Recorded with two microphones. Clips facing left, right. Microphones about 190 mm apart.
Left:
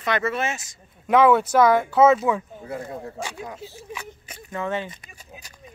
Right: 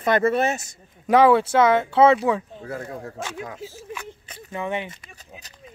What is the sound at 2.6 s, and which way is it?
Speech, 15° left (ahead or behind).